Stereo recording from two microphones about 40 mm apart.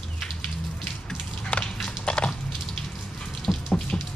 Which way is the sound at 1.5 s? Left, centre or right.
Left.